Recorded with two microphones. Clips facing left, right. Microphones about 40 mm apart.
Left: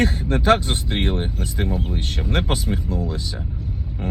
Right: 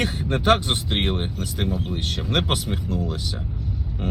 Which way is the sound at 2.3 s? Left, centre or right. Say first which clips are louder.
Left 1 dB; right.